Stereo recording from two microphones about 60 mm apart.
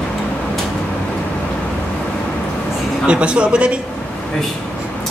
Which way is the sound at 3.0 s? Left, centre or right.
Centre.